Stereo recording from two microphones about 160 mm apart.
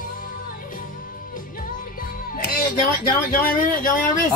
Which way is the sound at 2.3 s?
60° left (ahead or behind).